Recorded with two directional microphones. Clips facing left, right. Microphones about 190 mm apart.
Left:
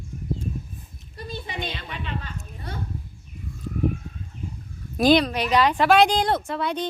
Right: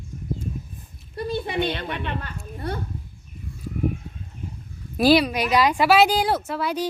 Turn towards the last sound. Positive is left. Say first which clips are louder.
# right 1 dB
turn(degrees=-5)  # may be behind; listen again after turning